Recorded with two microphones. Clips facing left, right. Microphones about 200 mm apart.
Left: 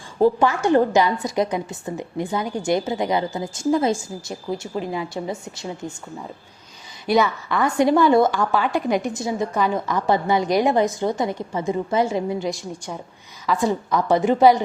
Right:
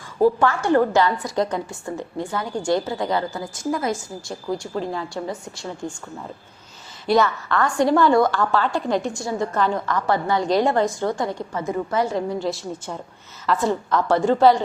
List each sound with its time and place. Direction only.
0.2 s a woman's voice: 20° left (ahead or behind)
7.4 s a woman's voice: 15° left (ahead or behind)
12.5 s a woman's voice: 5° right (ahead or behind)
13.5 s a woman's voice: 15° left (ahead or behind)